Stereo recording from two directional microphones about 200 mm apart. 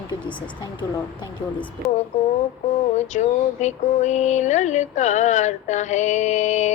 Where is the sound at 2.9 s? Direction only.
35° left (ahead or behind).